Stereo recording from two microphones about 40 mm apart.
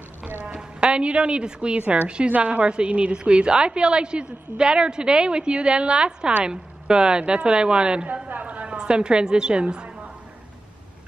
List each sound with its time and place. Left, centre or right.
0.6 s a woman's voice: right
1.8 s a woman's voice: right
8.5 s a sound: right
8.7 s a woman's voice: right